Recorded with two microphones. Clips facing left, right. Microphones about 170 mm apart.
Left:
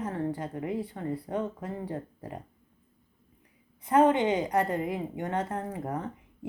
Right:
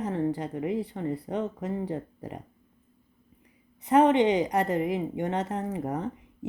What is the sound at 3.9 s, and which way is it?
Speech, 20° right (ahead or behind).